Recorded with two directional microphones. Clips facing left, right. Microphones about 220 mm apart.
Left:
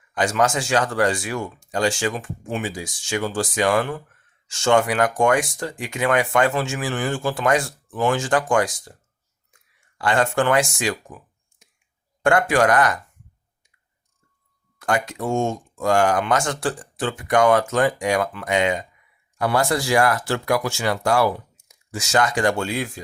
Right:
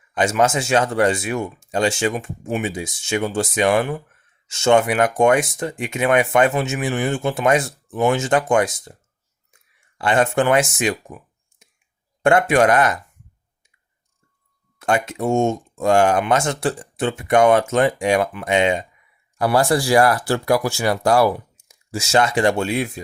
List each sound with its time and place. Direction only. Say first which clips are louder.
0.1 s speech: right 2 dB; 25° right (ahead or behind)
10.0 s speech: right 2 dB; 20° right (ahead or behind)
12.2 s speech: right 3 dB; 25° right (ahead or behind)
14.8 s speech: right 3 dB; 25° right (ahead or behind)